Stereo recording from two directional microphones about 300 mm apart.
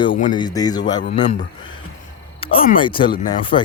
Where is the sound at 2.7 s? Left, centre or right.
Centre.